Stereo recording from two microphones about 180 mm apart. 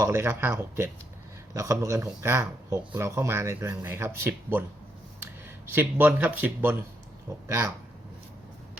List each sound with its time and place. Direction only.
0.0 s speech: 15° right (ahead or behind)
5.7 s speech: 10° right (ahead or behind)